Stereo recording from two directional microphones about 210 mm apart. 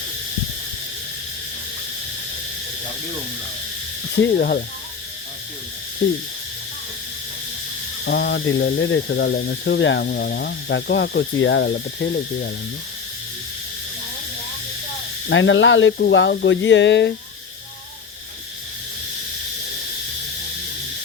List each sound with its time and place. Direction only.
4.2 s speech: 50° left (ahead or behind)
8.0 s speech: 55° left (ahead or behind)
15.3 s speech: 60° left (ahead or behind)